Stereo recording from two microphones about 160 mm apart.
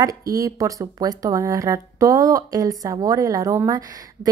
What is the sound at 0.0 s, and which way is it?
Speech, 20° right (ahead or behind).